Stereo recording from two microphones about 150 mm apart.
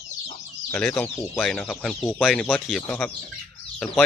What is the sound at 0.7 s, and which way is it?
Speech, 10° left (ahead or behind).